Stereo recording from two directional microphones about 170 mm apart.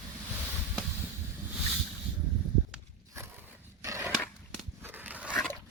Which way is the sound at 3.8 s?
15° right (ahead or behind).